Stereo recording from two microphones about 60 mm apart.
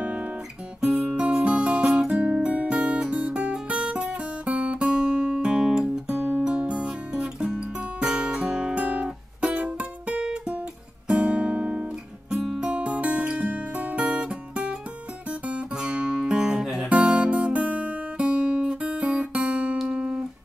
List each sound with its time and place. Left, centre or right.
0.0 s guitar: centre
0.7 s music: centre
3.6 s guitar: centre
6.4 s music: centre
11.1 s guitar: centre
12.5 s music: right
15.4 s guitar: centre
16.9 s guitar: centre
19.8 s music: centre